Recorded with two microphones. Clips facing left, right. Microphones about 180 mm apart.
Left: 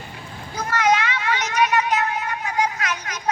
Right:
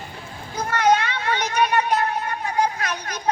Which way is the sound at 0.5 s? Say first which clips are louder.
Right 1 dB; 30° right (ahead or behind).